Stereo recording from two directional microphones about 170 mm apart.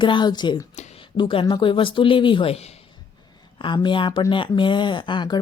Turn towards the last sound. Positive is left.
turn(degrees=25)  # may be behind; listen again after turning